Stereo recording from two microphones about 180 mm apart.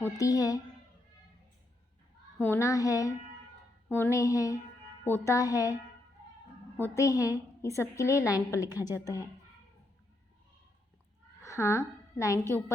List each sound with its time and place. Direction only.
0.0 s a woman's voice: 20° left (ahead or behind)
2.4 s a woman's voice: 15° left (ahead or behind)
6.8 s a woman's voice: 15° left (ahead or behind)
11.4 s a woman's voice: 15° left (ahead or behind)